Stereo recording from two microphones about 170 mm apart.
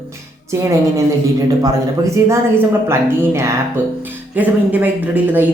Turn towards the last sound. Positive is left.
turn(degrees=-10)  # may be behind; listen again after turning